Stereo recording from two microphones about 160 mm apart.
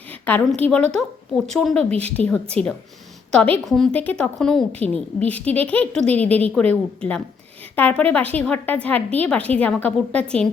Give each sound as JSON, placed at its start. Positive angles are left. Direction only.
{"t": 0.1, "sound": "a woman's voice", "side_deg": 10}